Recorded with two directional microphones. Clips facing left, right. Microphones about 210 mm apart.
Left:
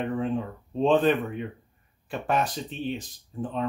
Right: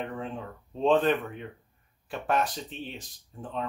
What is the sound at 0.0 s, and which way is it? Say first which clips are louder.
Speech: left 7 dB; 5° left (ahead or behind).